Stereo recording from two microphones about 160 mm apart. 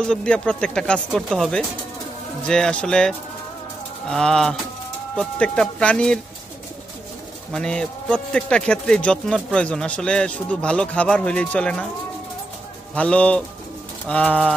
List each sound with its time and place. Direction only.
0.0 s speech: 5° left (ahead or behind)
7.5 s speech: 5° left (ahead or behind)
12.9 s speech: 10° left (ahead or behind)